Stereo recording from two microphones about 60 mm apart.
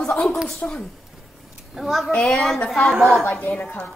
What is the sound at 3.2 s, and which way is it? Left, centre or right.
Speech, left.